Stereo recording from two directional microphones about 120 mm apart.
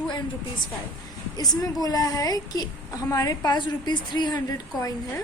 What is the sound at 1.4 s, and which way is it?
A woman's voice, 30° left (ahead or behind).